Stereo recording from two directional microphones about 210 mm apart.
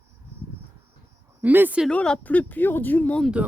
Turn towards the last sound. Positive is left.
turn(degrees=5)  # may be behind; listen again after turning